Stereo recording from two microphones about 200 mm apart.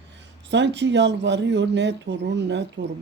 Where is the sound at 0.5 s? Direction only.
60° right (ahead or behind).